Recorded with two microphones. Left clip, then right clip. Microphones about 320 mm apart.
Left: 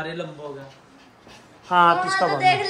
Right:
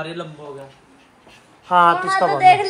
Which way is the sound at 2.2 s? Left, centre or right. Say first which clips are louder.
Right 8 dB; centre.